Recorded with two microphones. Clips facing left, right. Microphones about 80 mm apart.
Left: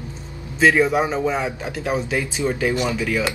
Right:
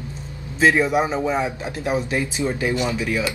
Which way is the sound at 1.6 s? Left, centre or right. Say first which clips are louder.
Even; right.